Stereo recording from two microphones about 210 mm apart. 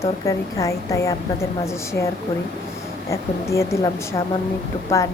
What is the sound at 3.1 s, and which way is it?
A woman's voice, 15° left (ahead or behind).